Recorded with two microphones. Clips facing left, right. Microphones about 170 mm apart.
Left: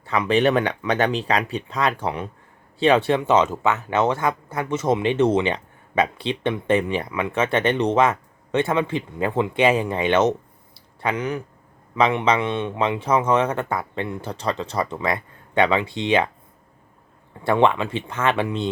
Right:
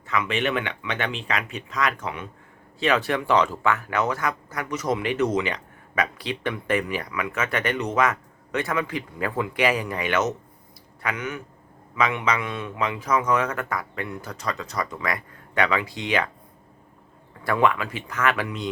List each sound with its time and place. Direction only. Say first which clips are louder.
0.0 s speech: left 6 dB; 35° left (ahead or behind)
17.4 s speech: left 4 dB; 25° left (ahead or behind)